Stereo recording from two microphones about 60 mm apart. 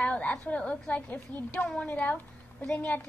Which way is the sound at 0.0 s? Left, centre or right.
Left.